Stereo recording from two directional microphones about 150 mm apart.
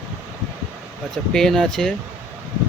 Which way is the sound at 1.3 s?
5° left (ahead or behind).